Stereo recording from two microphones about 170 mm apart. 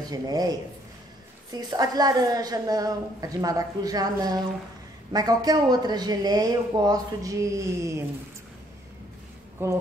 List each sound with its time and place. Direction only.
0.1 s speech: 20° right (ahead or behind)
9.6 s speech: 15° right (ahead or behind)